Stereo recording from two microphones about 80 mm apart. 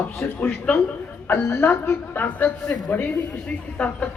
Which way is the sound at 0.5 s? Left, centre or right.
Centre.